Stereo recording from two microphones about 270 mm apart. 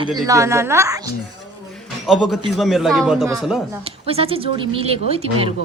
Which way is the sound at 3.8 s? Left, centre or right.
Right.